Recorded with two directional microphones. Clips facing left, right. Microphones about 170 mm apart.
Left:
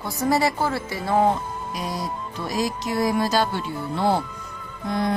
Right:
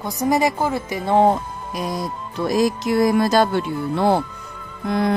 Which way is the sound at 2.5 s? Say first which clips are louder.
Right 7 dB; 50° right (ahead or behind).